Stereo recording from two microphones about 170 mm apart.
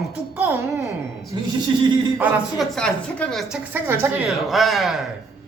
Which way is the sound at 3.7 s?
10° right (ahead or behind).